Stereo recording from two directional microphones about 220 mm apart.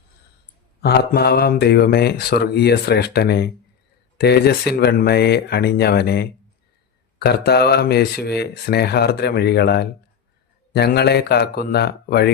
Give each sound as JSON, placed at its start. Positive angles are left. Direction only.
{"t": 0.8, "sound": "speech", "side_deg": 45}